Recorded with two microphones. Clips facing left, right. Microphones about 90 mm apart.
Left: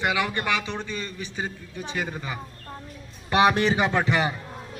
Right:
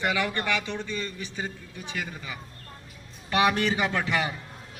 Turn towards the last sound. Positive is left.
turn(degrees=30)  # may be behind; listen again after turning